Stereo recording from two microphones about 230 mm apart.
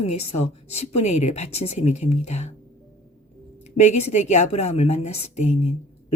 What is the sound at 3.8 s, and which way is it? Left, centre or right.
A woman's voice, left.